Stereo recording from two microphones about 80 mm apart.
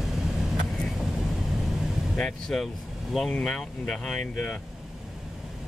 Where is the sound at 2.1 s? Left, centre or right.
Centre.